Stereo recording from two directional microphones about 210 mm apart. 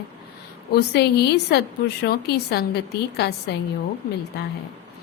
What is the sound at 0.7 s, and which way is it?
A woman's voice, 50° left (ahead or behind).